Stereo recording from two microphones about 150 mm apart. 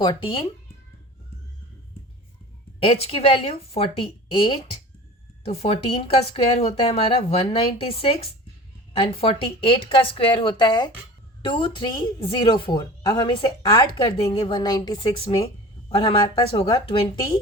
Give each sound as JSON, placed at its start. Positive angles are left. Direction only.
{"t": 0.0, "sound": "speech", "side_deg": 35}
{"t": 2.8, "sound": "a woman's voice", "side_deg": 40}